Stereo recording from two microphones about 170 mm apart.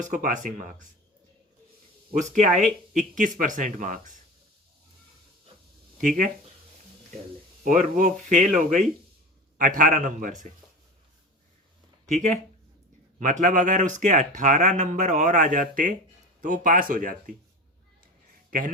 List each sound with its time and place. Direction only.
0.1 s speech: 55° right (ahead or behind)
2.1 s speech: 45° right (ahead or behind)
6.0 s speech: 50° right (ahead or behind)
7.6 s speech: 50° right (ahead or behind)
12.0 s speech: 45° right (ahead or behind)